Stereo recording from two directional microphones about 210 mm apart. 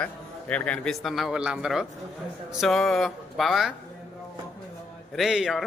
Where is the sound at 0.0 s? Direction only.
5° left (ahead or behind).